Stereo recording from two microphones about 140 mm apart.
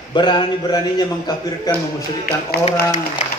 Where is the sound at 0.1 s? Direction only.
35° left (ahead or behind).